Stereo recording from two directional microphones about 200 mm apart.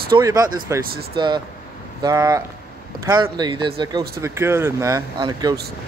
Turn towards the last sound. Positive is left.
turn(degrees=-20)  # may be behind; listen again after turning